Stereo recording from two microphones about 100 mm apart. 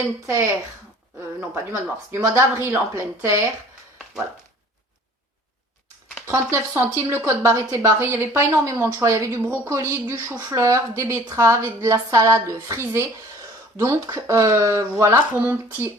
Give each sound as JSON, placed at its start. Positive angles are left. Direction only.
{"t": 1.4, "sound": "speech", "side_deg": -25}
{"t": 6.2, "sound": "a woman's voice", "side_deg": -30}
{"t": 15.4, "sound": "speech", "side_deg": -20}